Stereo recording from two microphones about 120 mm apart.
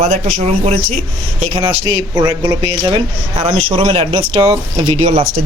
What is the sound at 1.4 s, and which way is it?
Speech, 45° right (ahead or behind).